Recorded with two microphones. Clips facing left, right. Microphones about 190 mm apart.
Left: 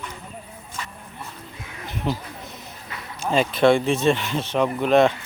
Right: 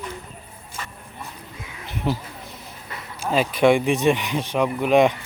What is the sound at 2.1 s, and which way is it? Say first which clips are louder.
Speech: right 2 dB; 10° right (ahead or behind).